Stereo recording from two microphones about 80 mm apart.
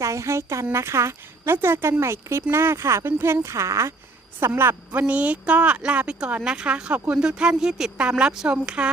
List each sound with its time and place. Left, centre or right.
0.0 s a woman's voice: right; by 8.9 s centre